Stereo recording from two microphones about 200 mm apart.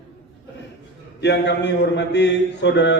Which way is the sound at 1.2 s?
60° left (ahead or behind).